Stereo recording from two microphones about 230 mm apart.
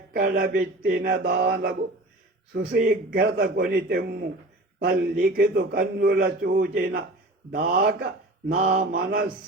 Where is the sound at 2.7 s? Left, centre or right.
Right.